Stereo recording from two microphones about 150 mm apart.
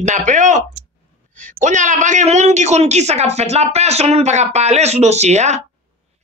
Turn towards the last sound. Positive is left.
turn(degrees=-50)  # may be behind; listen again after turning